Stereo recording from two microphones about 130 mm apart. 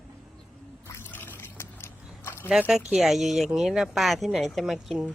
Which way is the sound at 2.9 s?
Centre (ahead or behind).